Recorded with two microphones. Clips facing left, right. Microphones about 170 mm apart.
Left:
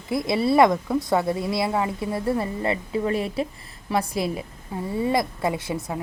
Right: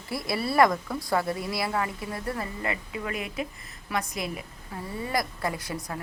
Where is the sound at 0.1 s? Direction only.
20° left (ahead or behind).